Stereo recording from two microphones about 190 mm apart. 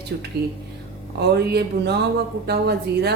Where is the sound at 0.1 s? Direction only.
55° right (ahead or behind).